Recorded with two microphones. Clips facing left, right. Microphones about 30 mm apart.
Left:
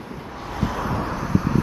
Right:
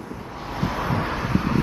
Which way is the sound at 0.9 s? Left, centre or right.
Right.